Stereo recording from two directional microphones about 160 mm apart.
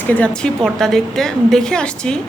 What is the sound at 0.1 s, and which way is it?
Speech, 5° left (ahead or behind).